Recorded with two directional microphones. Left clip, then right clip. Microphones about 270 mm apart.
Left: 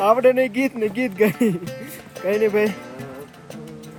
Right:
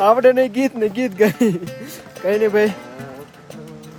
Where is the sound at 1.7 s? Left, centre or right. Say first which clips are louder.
Right 1 dB; centre.